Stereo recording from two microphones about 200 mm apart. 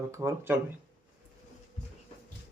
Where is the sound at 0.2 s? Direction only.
15° right (ahead or behind).